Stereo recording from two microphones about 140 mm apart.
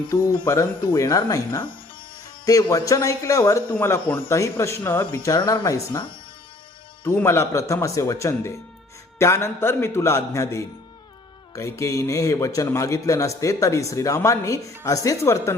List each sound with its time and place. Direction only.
0.4 s a man's voice: 20° left (ahead or behind)